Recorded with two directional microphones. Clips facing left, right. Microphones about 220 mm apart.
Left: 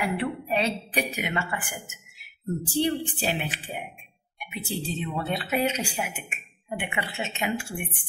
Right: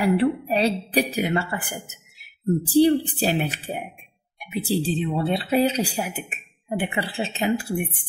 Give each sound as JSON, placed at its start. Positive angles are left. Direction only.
{"t": 0.0, "sound": "speech", "side_deg": -35}